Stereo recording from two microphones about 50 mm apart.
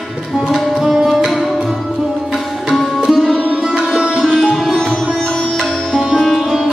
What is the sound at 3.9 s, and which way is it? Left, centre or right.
Music, centre.